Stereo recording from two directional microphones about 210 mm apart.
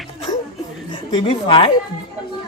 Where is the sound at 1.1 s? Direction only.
25° left (ahead or behind).